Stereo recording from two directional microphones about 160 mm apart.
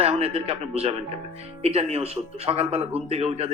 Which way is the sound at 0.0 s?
40° right (ahead or behind).